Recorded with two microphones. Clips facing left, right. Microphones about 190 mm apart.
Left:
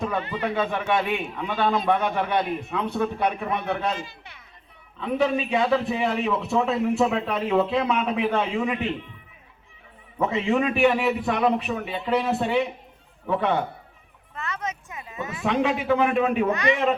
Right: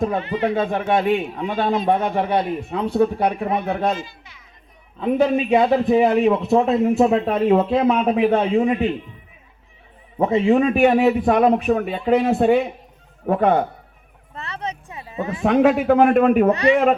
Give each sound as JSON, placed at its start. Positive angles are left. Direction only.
{"t": 0.2, "sound": "speech", "side_deg": -30}
{"t": 0.5, "sound": "a man's voice", "side_deg": -45}
{"t": 1.7, "sound": "speech", "side_deg": -30}
{"t": 2.9, "sound": "a man's voice", "side_deg": -45}
{"t": 3.9, "sound": "speech", "side_deg": 60}
{"t": 4.9, "sound": "a man's voice", "side_deg": -45}
{"t": 10.2, "sound": "a man's voice", "side_deg": -40}
{"t": 14.3, "sound": "a sound", "side_deg": -35}
{"t": 15.4, "sound": "a man's voice", "side_deg": -50}
{"t": 16.5, "sound": "speech", "side_deg": -35}